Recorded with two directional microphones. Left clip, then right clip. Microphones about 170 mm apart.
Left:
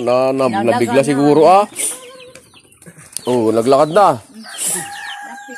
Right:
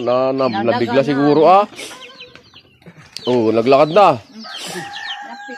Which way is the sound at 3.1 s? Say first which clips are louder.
Even; 5° left (ahead or behind).